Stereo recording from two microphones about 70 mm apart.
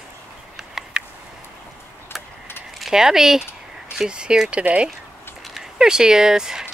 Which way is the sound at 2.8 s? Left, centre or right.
Centre.